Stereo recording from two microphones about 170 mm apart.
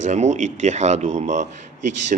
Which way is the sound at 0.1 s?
45° right (ahead or behind).